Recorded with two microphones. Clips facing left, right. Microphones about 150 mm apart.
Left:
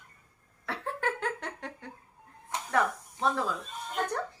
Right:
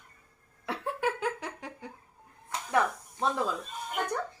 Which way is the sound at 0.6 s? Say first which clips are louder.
Right 2 dB; 10° right (ahead or behind).